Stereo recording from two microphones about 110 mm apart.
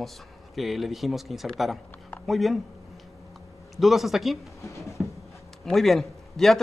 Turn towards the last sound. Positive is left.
turn(degrees=5)  # may be behind; listen again after turning